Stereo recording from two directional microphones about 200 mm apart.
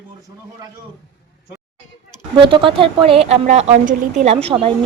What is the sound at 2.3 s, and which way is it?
A woman's voice, 25° right (ahead or behind).